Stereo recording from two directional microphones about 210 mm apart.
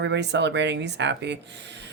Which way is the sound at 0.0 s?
55° right (ahead or behind).